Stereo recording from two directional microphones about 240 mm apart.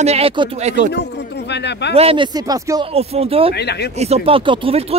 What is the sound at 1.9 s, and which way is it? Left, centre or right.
Speech, right.